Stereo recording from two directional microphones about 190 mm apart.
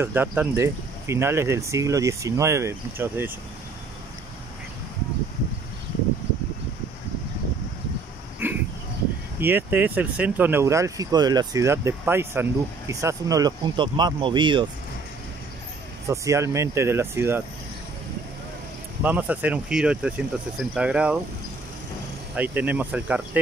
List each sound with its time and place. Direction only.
0.0 s speech: 10° right (ahead or behind)
8.4 s a sound: 10° right (ahead or behind)
9.4 s speech: 10° right (ahead or behind)
16.1 s speech: 15° right (ahead or behind)
19.0 s speech: 10° right (ahead or behind)
22.3 s speech: 10° right (ahead or behind)